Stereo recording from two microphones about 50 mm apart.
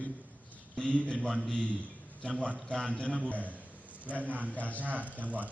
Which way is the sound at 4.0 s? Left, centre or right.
Right.